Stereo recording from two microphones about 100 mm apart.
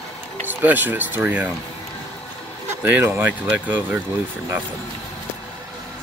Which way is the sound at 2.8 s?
20° right (ahead or behind).